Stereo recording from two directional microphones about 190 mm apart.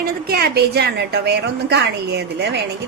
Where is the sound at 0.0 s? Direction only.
55° right (ahead or behind).